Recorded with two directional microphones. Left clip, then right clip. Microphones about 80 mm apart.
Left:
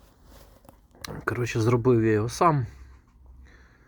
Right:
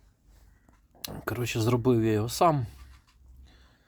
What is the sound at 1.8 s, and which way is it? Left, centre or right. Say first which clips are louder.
Speech: left 4 dB; centre.